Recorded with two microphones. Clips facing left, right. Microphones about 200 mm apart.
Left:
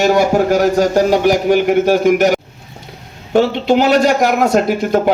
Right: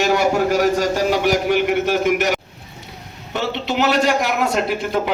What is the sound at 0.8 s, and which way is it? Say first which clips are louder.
Speech: left 6 dB; 45° left (ahead or behind).